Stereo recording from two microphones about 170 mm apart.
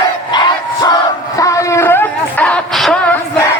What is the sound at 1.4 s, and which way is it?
Wail, 20° left (ahead or behind).